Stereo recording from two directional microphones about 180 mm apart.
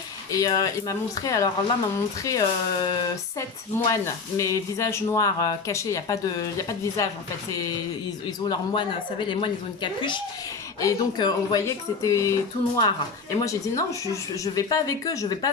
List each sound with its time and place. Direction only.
0.3 s speech: 20° left (ahead or behind)
8.4 s speech: 25° left (ahead or behind)